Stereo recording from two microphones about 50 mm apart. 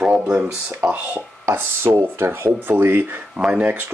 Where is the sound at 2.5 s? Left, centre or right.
Right.